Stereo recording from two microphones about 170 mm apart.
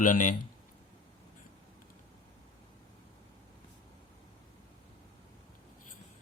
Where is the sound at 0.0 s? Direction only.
50° left (ahead or behind).